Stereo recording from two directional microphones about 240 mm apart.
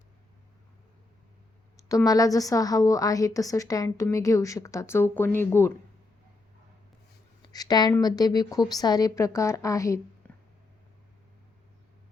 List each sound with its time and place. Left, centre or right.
1.9 s a woman's voice: centre
7.4 s a woman's voice: centre